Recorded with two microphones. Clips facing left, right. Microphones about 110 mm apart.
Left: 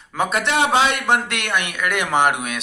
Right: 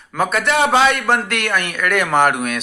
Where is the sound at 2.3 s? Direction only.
60° right (ahead or behind).